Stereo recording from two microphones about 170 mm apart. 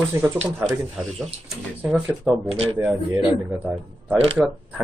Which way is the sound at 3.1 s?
25° right (ahead or behind).